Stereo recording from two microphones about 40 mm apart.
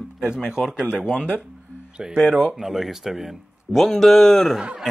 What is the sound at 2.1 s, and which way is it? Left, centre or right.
A man's voice, centre.